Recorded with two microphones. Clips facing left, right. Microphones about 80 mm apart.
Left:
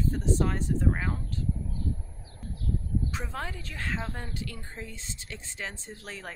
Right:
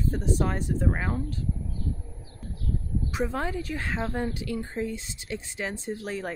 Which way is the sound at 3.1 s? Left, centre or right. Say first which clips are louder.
Right 7 dB; centre.